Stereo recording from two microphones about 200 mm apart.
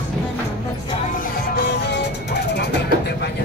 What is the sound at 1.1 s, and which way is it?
Music, 55° left (ahead or behind).